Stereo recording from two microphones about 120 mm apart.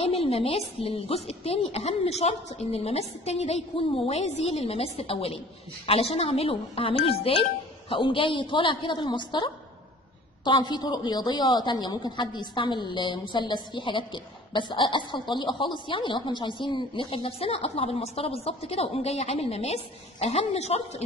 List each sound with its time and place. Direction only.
0.0 s a woman's voice: 55° left (ahead or behind)
3.7 s a woman's voice: 45° left (ahead or behind); by 21.0 s 65° left (ahead or behind)